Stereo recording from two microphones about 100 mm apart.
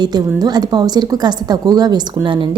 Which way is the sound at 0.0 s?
45° right (ahead or behind).